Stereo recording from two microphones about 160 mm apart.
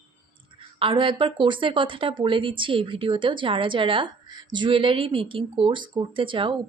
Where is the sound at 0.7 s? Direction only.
35° right (ahead or behind).